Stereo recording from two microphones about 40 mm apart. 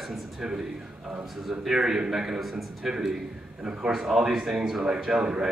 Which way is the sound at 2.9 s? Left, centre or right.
Centre.